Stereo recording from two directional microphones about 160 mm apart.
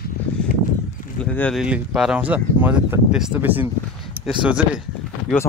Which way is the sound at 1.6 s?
5° right (ahead or behind).